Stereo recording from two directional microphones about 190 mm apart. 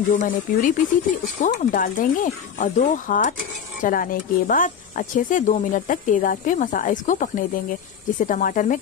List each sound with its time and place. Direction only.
0.1 s speech: 45° left (ahead or behind)